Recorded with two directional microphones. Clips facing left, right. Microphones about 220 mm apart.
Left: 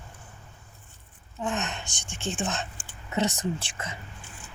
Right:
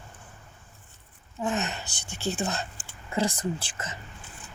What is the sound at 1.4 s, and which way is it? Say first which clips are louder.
Speech: right 2 dB; 5° right (ahead or behind).